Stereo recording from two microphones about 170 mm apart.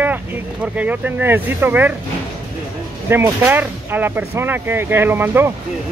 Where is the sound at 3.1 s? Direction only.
15° right (ahead or behind).